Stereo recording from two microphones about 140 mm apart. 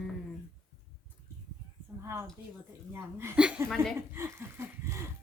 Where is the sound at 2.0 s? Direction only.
20° right (ahead or behind).